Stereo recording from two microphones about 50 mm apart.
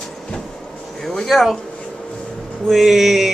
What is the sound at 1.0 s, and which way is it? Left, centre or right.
Speech, centre.